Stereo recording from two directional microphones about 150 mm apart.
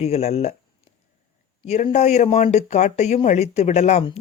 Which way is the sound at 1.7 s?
45° left (ahead or behind).